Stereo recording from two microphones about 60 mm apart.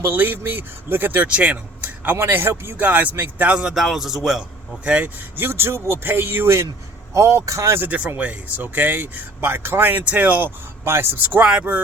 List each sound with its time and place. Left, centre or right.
0.0 s speech: right
2.7 s speech: right
3.5 s a man's voice: centre
3.8 s a man's voice: centre
4.9 s speech: right
5.4 s speech: right
7.8 s speech: right
10.8 s speech: right
11.2 s speech: right